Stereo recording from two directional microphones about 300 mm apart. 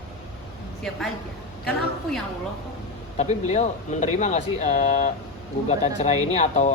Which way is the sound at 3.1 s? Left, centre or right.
Left.